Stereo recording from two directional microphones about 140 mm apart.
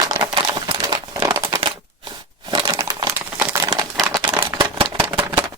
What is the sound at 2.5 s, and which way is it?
Crushing, 30° right (ahead or behind).